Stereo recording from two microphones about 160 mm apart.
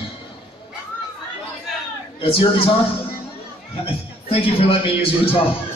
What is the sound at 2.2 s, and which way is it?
Speech, 35° left (ahead or behind).